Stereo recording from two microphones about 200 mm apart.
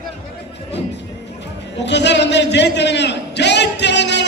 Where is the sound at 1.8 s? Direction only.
60° left (ahead or behind).